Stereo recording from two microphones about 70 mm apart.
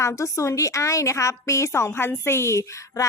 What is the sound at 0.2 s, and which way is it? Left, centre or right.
A woman's voice, left.